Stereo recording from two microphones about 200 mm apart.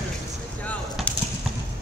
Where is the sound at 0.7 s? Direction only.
5° left (ahead or behind).